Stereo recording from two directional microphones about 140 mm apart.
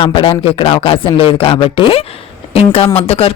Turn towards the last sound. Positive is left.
turn(degrees=45)  # may be behind; listen again after turning